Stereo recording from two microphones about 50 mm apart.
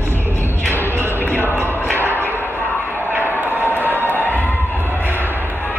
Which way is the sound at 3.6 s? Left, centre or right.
Left.